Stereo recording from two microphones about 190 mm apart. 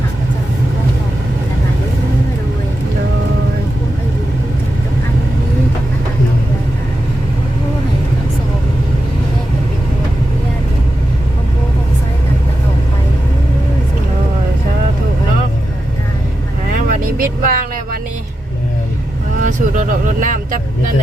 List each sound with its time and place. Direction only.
16.9 s vehicle: 45° right (ahead or behind)
19.4 s vehicle: 45° right (ahead or behind)